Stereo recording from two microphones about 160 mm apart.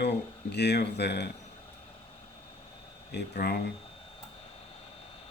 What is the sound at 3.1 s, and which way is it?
Speech, 85° left.